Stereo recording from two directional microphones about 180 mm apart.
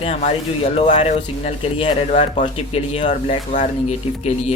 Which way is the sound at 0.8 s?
35° left (ahead or behind).